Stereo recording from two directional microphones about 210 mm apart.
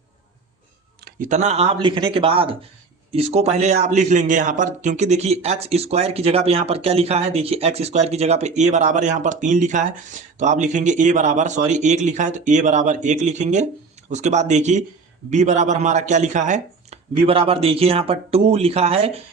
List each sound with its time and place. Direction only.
1.0 s a man's voice: 35° right (ahead or behind)